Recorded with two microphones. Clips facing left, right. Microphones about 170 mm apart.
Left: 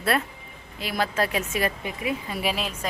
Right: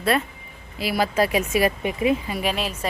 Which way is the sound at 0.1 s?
Centre (ahead or behind).